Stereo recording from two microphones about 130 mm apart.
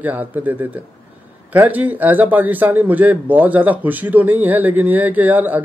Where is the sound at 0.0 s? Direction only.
15° right (ahead or behind).